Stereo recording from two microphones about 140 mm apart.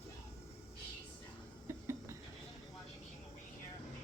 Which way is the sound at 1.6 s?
20° right (ahead or behind).